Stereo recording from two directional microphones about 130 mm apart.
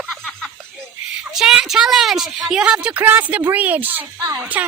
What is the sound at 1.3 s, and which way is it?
A woman's voice, 5° right (ahead or behind).